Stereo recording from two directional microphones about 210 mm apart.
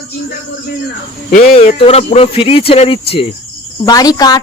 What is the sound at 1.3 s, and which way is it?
Speech, 30° left (ahead or behind).